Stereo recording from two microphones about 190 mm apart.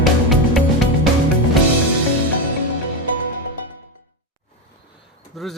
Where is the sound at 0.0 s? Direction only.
Centre (ahead or behind).